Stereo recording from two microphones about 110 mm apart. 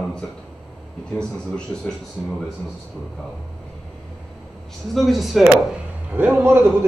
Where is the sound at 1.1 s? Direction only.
5° left (ahead or behind).